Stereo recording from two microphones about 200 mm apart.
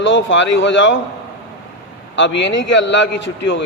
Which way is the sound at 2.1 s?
65° left (ahead or behind).